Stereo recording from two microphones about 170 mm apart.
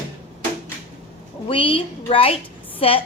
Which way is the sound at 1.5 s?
30° left (ahead or behind).